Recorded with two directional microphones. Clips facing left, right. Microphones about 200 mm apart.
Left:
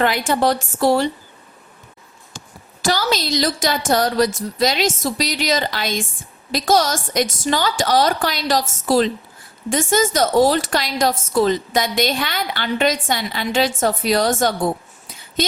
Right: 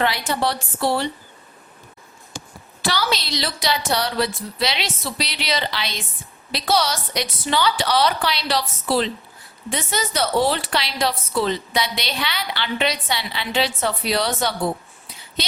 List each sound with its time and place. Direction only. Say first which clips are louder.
0.0 s a woman's voice: left 4 dB; 45° left (ahead or behind)
2.8 s a woman's voice: left 4 dB; 45° left (ahead or behind)